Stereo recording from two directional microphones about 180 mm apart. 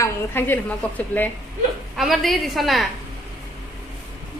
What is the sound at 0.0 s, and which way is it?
A woman's voice, 10° left (ahead or behind).